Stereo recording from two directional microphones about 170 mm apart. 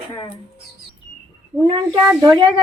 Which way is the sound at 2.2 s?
25° right (ahead or behind).